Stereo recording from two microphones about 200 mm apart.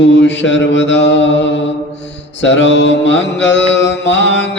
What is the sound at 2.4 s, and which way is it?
Mantra, 65° left (ahead or behind).